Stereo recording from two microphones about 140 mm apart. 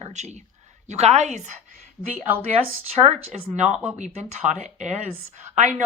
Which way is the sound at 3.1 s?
55° right (ahead or behind).